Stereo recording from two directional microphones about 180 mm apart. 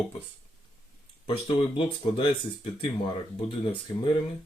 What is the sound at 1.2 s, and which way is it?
Speech, 30° left (ahead or behind).